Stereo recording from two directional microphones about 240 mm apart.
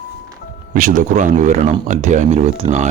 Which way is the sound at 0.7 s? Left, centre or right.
Right.